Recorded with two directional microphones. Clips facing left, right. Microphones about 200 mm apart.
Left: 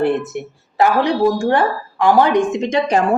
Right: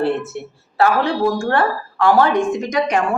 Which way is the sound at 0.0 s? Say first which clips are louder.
Left 2 dB; 15° left (ahead or behind).